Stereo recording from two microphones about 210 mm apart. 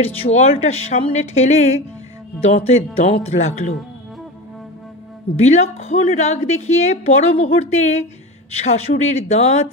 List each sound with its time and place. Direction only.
0.2 s a woman's voice: 30° left (ahead or behind)
5.3 s a woman's voice: 30° left (ahead or behind)